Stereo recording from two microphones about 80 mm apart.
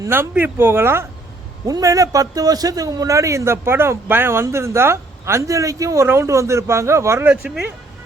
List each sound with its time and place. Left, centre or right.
0.1 s speech: right
1.6 s a man's voice: right